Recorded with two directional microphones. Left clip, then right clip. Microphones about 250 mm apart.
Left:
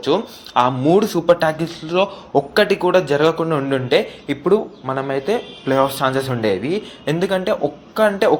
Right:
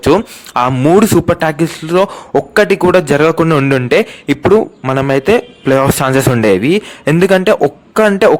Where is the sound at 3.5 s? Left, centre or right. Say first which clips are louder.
Right 8 dB; right.